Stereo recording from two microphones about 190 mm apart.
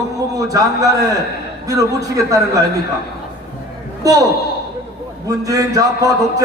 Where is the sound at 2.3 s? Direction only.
15° right (ahead or behind).